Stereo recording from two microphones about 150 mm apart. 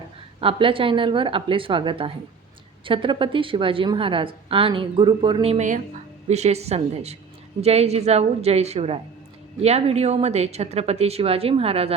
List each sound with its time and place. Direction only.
0.3 s a woman's voice: 35° right (ahead or behind)
5.6 s speech: 55° right (ahead or behind)